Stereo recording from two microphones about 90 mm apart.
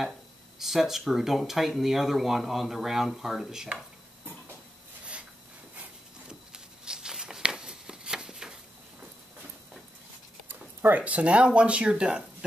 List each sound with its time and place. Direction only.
0.6 s speech: 5° right (ahead or behind)
6.2 s a sound: 10° right (ahead or behind)
10.5 s speech: 20° right (ahead or behind)